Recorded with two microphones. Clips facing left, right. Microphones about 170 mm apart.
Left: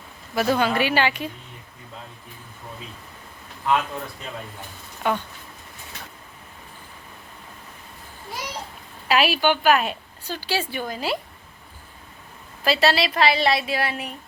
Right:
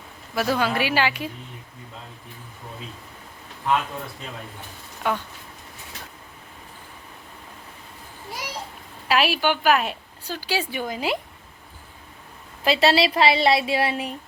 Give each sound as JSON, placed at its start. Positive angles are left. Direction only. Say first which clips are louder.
{"t": 0.3, "sound": "a woman's voice", "louder": "left 2 dB", "side_deg": 0}
{"t": 5.0, "sound": "a woman's voice", "louder": "left 1 dB", "side_deg": 0}
{"t": 9.0, "sound": "a woman's voice", "louder": "left 1 dB", "side_deg": 0}
{"t": 10.5, "sound": "a woman's voice", "louder": "even", "side_deg": -15}
{"t": 12.6, "sound": "a woman's voice", "louder": "right 2 dB", "side_deg": -25}